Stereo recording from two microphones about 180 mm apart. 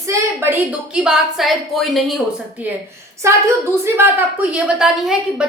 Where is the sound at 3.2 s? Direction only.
15° right (ahead or behind).